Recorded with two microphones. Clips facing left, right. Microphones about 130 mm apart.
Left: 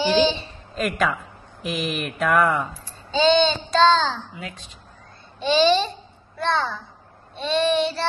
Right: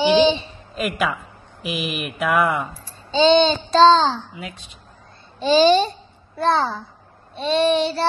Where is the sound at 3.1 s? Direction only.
30° right (ahead or behind).